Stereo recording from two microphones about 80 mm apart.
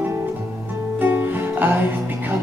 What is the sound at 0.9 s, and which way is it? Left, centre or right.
Music, right.